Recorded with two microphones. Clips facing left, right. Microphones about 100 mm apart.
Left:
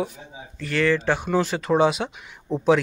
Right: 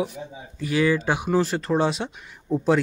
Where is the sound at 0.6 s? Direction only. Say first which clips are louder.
Even; 10° right (ahead or behind).